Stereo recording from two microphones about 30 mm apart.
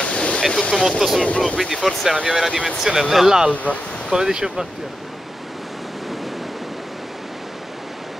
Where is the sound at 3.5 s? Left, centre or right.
Left.